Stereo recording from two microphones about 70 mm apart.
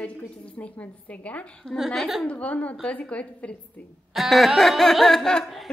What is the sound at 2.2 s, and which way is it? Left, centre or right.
A woman's voice, centre.